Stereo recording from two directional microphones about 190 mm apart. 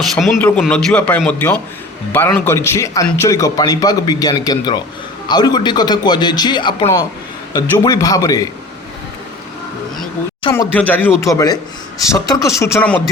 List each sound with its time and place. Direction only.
0.0 s a man's voice: centre (ahead or behind); by 8.4 s 20° left (ahead or behind)
10.8 s a man's voice: 10° left (ahead or behind)